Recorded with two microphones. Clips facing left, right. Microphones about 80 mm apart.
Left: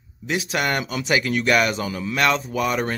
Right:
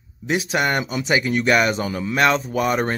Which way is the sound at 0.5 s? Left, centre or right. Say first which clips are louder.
Right 2 dB; right.